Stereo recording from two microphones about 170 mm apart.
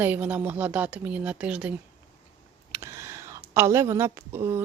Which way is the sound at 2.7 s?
15° right (ahead or behind).